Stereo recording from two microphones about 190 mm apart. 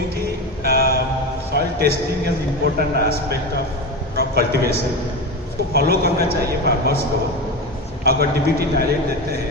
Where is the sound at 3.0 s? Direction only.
55° right (ahead or behind).